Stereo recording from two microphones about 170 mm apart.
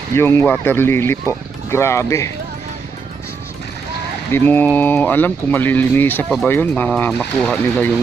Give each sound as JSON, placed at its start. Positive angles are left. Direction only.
{"t": 0.2, "sound": "speech", "side_deg": 15}
{"t": 4.3, "sound": "speech", "side_deg": 10}